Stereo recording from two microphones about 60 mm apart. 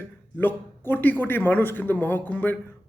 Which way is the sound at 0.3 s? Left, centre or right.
Left.